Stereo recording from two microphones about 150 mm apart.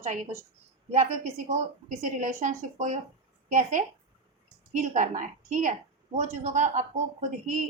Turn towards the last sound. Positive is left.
turn(degrees=-55)  # may be behind; listen again after turning